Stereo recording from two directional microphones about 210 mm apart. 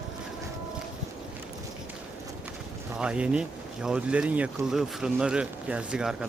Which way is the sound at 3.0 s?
5° right (ahead or behind).